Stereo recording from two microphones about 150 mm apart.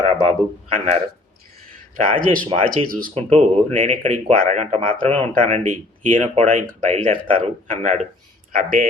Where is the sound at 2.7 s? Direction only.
70° right (ahead or behind).